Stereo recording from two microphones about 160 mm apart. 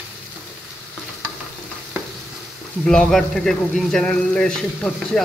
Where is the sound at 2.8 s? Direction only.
5° left (ahead or behind).